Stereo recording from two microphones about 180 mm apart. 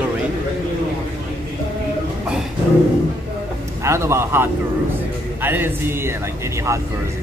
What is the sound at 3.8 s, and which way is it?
A man's voice, 15° right (ahead or behind).